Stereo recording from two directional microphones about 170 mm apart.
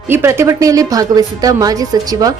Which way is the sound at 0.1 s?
15° right (ahead or behind).